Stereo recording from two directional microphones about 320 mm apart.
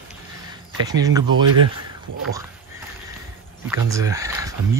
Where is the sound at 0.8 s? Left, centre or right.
Centre.